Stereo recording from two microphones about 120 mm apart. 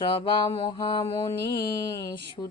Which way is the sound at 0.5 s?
45° left (ahead or behind).